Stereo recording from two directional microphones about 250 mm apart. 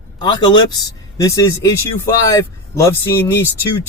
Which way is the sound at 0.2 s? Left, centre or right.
Centre.